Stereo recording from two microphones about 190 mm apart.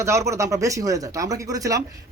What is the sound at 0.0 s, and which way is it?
Speech, 15° right (ahead or behind).